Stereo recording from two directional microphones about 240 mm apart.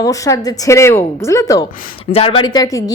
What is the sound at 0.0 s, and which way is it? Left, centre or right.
A woman's voice, centre.